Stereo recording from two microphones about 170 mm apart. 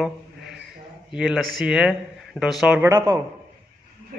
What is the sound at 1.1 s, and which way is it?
A man's voice, 5° right (ahead or behind).